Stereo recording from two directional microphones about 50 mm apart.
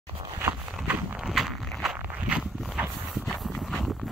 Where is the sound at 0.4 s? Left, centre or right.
Right.